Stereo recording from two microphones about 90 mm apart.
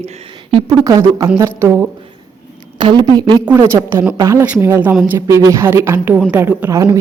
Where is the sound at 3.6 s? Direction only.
30° right (ahead or behind).